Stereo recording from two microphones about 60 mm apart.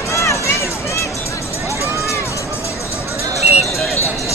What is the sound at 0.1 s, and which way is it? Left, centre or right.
Run, left.